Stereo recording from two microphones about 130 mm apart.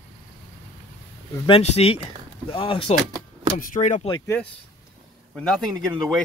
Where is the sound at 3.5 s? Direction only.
90° left; by 4.1 s 70° left (ahead or behind).